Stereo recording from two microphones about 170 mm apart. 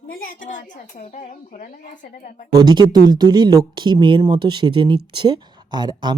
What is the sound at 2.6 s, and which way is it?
Speech, 25° right (ahead or behind).